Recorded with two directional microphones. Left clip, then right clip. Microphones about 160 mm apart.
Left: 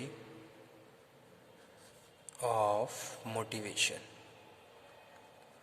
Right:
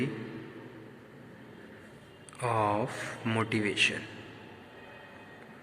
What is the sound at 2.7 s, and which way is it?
Speech, 70° left (ahead or behind).